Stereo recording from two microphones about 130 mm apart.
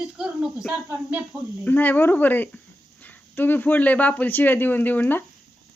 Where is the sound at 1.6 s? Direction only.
15° left (ahead or behind).